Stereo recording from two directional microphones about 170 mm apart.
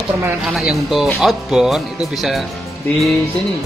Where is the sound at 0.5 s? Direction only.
Centre (ahead or behind).